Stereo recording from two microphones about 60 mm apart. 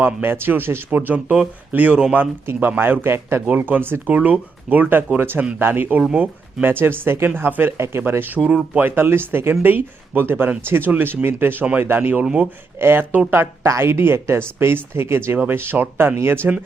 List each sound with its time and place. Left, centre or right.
0.0 s speech: right
4.1 s speech: right
8.4 s speech: centre
8.8 s speech: right
13.6 s speech: right